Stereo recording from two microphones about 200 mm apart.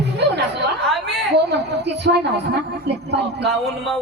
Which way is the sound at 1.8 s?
60° right (ahead or behind).